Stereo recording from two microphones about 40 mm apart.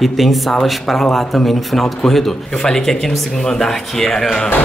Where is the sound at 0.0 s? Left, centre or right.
Centre.